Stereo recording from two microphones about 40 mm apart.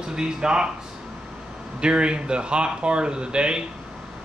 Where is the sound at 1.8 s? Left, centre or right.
Right.